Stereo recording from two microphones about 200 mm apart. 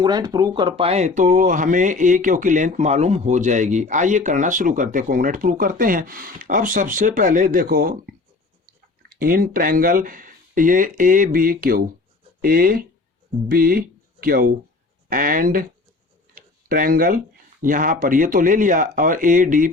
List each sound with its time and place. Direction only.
0.0 s speech: 20° right (ahead or behind); by 7.9 s 45° right (ahead or behind)
9.0 s speech: 45° right (ahead or behind)
16.3 s tick-tock: 45° right (ahead or behind)
17.6 s speech: 40° right (ahead or behind)